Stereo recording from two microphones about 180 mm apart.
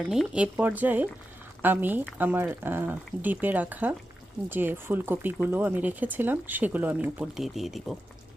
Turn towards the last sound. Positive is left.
turn(degrees=0)  # may be behind; listen again after turning